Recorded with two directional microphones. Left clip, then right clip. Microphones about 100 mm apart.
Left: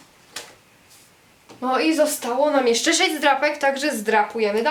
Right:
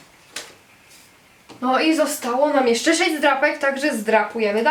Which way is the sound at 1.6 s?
15° left (ahead or behind).